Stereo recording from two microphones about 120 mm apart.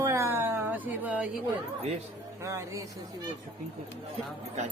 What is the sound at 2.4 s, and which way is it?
Speech, 25° right (ahead or behind).